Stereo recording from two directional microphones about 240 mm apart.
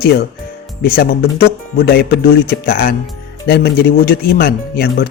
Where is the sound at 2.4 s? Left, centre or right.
Left.